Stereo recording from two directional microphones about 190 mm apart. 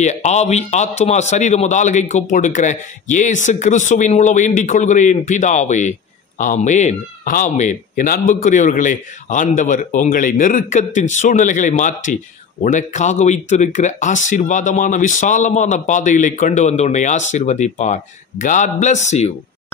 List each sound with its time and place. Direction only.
0.0 s speech: 35° left (ahead or behind)